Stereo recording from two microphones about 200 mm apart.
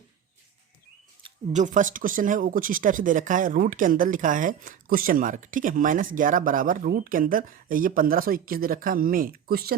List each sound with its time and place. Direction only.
1.5 s speech: 40° right (ahead or behind)